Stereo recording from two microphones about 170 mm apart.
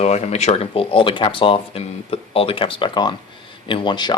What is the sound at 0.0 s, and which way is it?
Speech, 40° left (ahead or behind).